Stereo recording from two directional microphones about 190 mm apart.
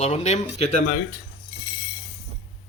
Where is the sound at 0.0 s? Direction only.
35° left (ahead or behind).